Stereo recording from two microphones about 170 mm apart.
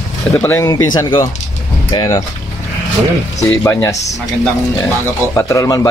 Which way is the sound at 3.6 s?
20° left (ahead or behind).